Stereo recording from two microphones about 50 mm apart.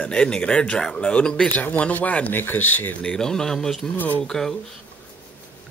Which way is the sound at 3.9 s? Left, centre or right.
Left.